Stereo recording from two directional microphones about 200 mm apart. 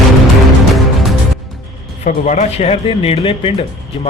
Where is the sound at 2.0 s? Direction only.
35° left (ahead or behind).